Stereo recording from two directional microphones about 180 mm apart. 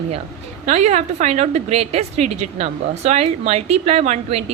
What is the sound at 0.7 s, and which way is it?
A woman's voice, 40° right (ahead or behind).